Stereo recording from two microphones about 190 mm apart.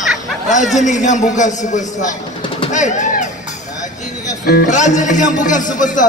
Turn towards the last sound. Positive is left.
turn(degrees=40)  # may be behind; listen again after turning